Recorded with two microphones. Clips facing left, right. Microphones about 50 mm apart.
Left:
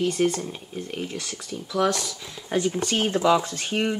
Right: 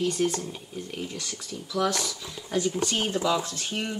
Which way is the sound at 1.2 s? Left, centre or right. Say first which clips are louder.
Left 3 dB; centre.